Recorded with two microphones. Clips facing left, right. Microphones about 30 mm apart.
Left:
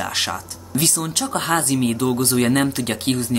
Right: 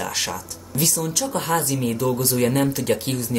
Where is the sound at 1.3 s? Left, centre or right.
Left.